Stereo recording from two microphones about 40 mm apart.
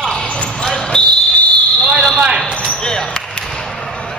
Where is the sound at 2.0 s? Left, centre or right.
Centre.